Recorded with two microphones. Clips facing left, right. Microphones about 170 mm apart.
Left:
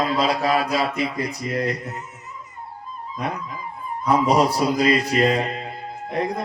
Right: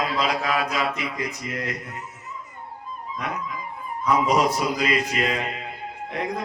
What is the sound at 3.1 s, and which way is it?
Dog, 35° left (ahead or behind).